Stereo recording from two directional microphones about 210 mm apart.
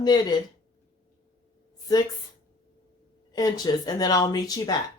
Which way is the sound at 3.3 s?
20° left (ahead or behind).